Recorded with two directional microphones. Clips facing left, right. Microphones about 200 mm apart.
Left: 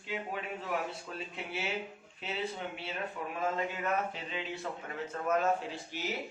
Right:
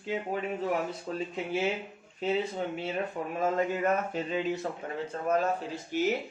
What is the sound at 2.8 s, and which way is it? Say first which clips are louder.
Speech: right 6 dB; 45° right (ahead or behind).